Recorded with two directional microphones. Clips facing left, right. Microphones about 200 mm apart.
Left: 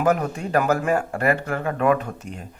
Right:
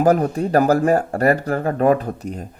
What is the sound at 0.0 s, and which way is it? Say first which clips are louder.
Speech: right 5 dB; 35° right (ahead or behind).